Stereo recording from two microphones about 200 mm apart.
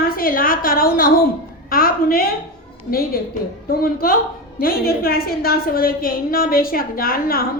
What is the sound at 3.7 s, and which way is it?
A woman's voice, 50° left (ahead or behind).